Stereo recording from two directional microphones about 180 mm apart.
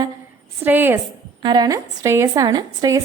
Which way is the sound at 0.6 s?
10° right (ahead or behind).